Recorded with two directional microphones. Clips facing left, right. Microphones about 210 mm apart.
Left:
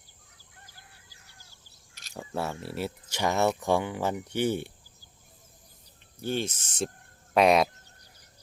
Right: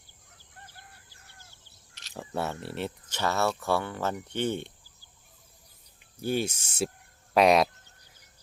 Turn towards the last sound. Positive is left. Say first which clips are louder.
# even
turn(degrees=0)  # may be behind; listen again after turning